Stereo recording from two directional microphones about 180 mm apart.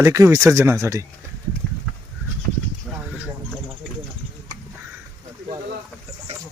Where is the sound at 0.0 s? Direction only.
15° right (ahead or behind).